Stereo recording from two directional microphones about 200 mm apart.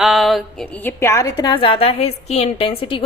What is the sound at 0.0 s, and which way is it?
A woman's voice, centre (ahead or behind).